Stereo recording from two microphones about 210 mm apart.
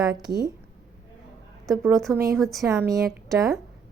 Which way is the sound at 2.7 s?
15° right (ahead or behind).